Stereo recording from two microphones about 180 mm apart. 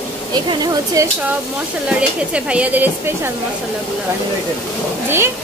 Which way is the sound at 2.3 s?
5° right (ahead or behind).